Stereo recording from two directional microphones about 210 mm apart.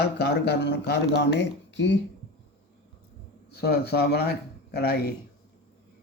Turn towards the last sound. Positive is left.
turn(degrees=50)  # may be behind; listen again after turning